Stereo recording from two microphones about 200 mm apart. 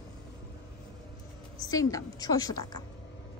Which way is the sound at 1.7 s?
15° left (ahead or behind).